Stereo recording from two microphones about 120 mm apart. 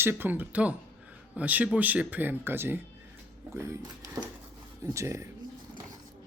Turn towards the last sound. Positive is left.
turn(degrees=-25)  # may be behind; listen again after turning